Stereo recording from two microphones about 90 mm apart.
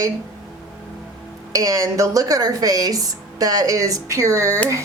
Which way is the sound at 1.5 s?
40° right (ahead or behind).